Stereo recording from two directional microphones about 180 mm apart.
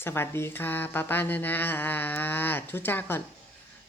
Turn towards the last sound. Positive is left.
turn(degrees=10)  # may be behind; listen again after turning